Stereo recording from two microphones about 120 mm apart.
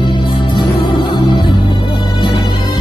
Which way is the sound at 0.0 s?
45° left (ahead or behind).